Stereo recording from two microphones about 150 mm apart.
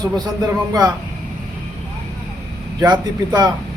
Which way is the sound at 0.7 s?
25° right (ahead or behind).